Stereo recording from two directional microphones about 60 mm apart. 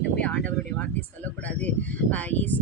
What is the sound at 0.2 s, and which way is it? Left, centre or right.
Speech, left.